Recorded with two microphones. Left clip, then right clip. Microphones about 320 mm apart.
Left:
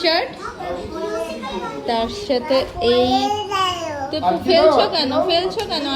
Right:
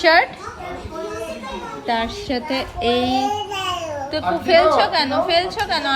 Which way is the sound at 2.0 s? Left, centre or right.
Centre.